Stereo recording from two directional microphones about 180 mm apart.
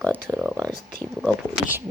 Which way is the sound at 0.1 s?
10° right (ahead or behind).